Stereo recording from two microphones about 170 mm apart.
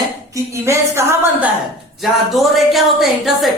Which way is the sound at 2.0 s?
Centre (ahead or behind).